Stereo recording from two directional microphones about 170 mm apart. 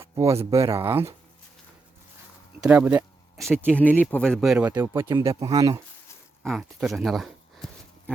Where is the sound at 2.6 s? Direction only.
10° right (ahead or behind).